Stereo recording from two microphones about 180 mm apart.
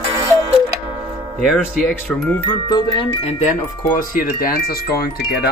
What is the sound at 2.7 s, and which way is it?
Chime, 30° left (ahead or behind).